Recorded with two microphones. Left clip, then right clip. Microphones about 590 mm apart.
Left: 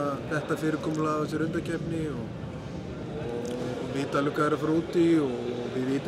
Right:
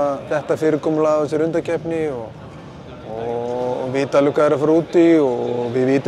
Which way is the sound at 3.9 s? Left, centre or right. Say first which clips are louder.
Right 12 dB; right.